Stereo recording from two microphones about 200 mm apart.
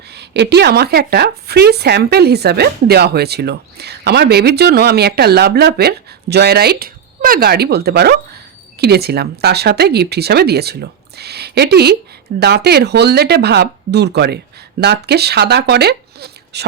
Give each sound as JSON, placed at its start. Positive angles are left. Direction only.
{"t": 0.1, "sound": "speech", "side_deg": -55}